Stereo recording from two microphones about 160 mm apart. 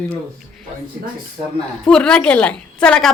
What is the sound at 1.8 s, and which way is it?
A woman's voice, 5° left (ahead or behind).